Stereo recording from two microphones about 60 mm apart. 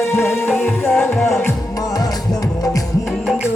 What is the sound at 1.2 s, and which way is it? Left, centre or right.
Music, left.